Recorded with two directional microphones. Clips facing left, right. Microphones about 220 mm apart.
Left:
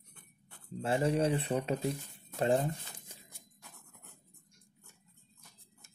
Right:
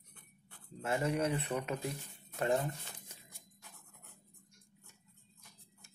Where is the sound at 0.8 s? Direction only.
30° left (ahead or behind).